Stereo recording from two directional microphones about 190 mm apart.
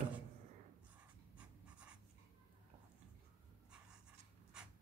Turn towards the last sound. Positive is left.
turn(degrees=-5)  # may be behind; listen again after turning